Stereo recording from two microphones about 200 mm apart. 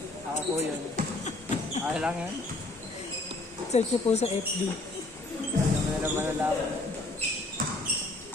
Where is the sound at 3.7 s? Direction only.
35° left (ahead or behind).